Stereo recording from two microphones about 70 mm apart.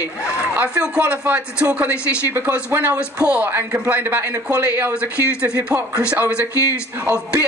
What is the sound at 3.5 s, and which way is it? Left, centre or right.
Speech, right.